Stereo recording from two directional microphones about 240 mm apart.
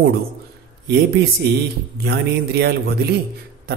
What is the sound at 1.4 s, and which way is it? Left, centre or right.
Speech, right.